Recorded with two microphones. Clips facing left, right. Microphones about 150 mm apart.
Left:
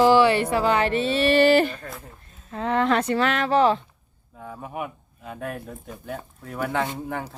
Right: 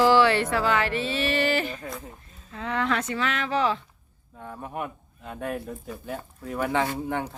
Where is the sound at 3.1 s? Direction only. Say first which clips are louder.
Left 6 dB; 60° left (ahead or behind).